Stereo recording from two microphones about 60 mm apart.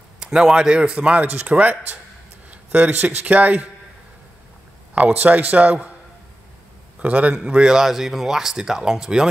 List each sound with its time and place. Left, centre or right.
0.2 s speech: centre
4.9 s speech: right
7.0 s a man's voice: right